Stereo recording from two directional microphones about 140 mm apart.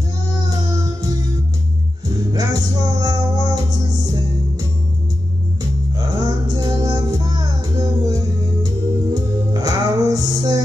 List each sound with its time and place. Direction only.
2.3 s music: 25° right (ahead or behind)
6.1 s child singing: 25° right (ahead or behind)
8.6 s music: 25° right (ahead or behind)